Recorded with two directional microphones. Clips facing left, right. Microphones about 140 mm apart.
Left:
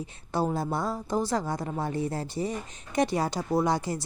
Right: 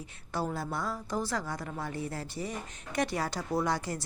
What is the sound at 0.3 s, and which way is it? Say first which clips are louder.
A woman's voice: left 6 dB; 20° left (ahead or behind).